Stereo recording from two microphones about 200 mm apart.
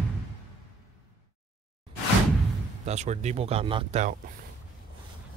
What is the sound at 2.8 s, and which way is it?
Speech, 35° right (ahead or behind).